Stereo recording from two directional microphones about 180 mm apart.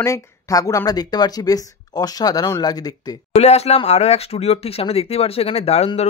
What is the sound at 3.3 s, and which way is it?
Speech, 35° left (ahead or behind).